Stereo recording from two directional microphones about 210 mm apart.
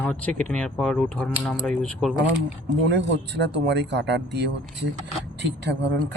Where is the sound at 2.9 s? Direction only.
55° right (ahead or behind).